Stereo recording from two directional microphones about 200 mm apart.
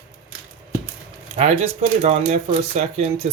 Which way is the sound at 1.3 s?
30° right (ahead or behind).